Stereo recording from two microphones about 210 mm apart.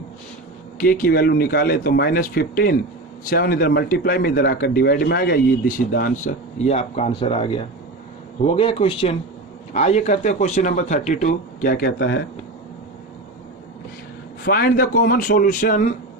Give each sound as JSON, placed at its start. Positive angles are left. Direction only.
{"t": 0.8, "sound": "speech", "side_deg": 45}
{"t": 14.4, "sound": "speech", "side_deg": 45}